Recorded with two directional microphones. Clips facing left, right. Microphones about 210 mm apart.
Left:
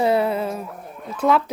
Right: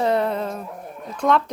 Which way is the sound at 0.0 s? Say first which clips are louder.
Left 2 dB; 5° left (ahead or behind).